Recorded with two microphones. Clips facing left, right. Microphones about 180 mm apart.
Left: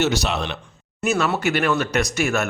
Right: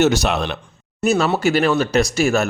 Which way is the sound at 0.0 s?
45° right (ahead or behind).